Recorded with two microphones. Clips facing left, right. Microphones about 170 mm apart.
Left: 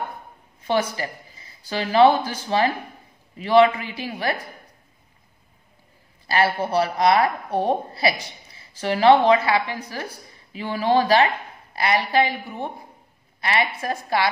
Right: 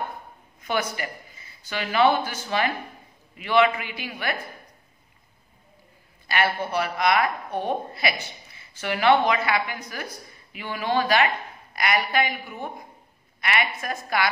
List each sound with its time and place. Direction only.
0.6 s a woman's voice: 30° left (ahead or behind)
6.2 s a woman's voice: 30° left (ahead or behind)